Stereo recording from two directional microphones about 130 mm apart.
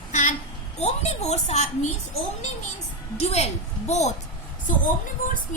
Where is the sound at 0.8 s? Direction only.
55° left (ahead or behind).